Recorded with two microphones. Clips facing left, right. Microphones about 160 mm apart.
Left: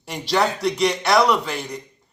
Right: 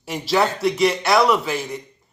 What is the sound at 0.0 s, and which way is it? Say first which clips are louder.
A man's voice: right 1 dB; centre (ahead or behind).